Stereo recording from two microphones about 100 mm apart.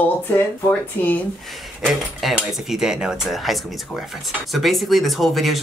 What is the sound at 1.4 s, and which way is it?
Speech, centre (ahead or behind).